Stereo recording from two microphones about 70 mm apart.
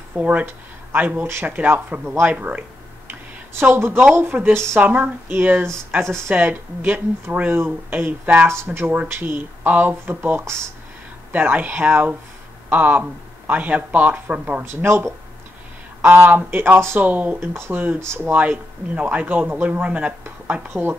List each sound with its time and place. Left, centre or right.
0.2 s speech: right
3.1 s a sound: right
4.1 s speech: right
4.7 s speech: right
8.5 s speech: right
14.7 s speech: right
17.4 s speech: right
17.7 s speech: right